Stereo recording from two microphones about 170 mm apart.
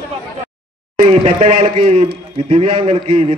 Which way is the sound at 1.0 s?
40° right (ahead or behind).